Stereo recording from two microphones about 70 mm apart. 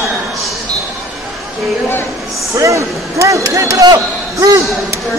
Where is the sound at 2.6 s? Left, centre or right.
Right.